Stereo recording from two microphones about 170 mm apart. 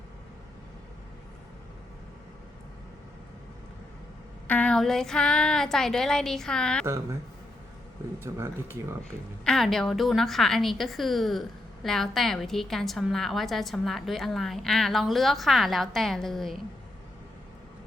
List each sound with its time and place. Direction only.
4.4 s a woman's voice: 10° left (ahead or behind)
6.8 s speech: 15° right (ahead or behind)
8.2 s speech: 15° right (ahead or behind)
9.4 s a woman's voice: centre (ahead or behind)